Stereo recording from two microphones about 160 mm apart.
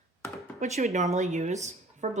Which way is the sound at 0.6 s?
45° right (ahead or behind).